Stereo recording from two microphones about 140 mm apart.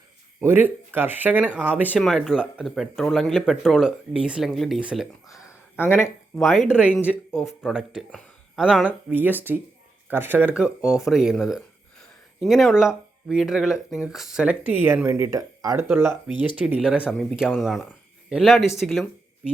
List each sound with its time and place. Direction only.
0.4 s speech: 15° right (ahead or behind)
2.0 s speech: centre (ahead or behind)
5.3 s a sound: 20° left (ahead or behind)
6.3 s speech: centre (ahead or behind)
10.8 s speech: 20° left (ahead or behind)
11.0 s speech: 5° right (ahead or behind)